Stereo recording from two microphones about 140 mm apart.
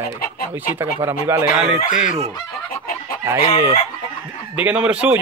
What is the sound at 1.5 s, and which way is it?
Speech, 5° right (ahead or behind).